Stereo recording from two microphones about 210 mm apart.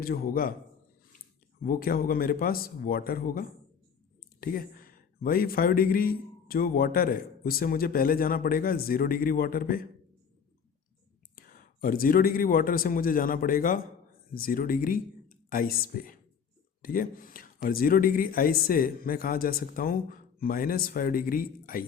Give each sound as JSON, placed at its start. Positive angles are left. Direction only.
{"t": 0.0, "sound": "a man's voice", "side_deg": 45}
{"t": 1.6, "sound": "a man's voice", "side_deg": 45}
{"t": 11.3, "sound": "a man's voice", "side_deg": 45}